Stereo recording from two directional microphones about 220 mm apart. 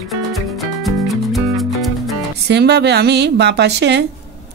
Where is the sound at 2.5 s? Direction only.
50° right (ahead or behind).